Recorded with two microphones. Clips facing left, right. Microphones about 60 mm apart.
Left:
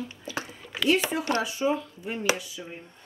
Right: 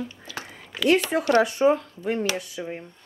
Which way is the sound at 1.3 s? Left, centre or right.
Right.